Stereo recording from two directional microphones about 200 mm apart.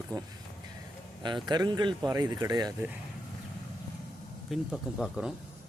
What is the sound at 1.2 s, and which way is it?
A man's voice, 20° right (ahead or behind).